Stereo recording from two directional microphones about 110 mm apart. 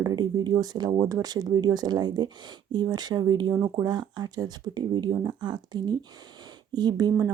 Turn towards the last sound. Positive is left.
turn(degrees=-40)  # may be behind; listen again after turning